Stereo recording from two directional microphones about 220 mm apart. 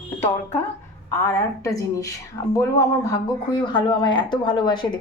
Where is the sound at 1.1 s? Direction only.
15° left (ahead or behind).